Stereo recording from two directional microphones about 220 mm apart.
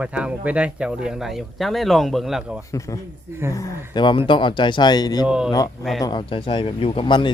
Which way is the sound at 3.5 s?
15° left (ahead or behind).